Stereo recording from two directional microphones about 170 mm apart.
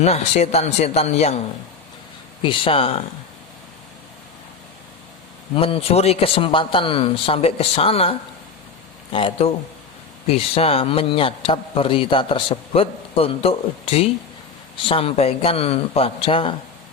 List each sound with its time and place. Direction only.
0.0 s a man's voice: 40° left (ahead or behind)
2.4 s a man's voice: 30° left (ahead or behind)
5.5 s a man's voice: 35° left (ahead or behind)
9.1 s a man's voice: 30° left (ahead or behind)